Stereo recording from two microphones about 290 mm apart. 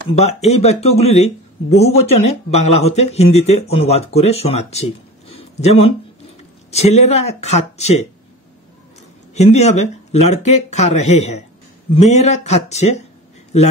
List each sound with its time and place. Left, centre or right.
0.1 s speech: left
9.3 s speech: left